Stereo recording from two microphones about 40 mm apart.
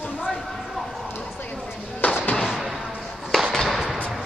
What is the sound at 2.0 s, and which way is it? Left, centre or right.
Music, left.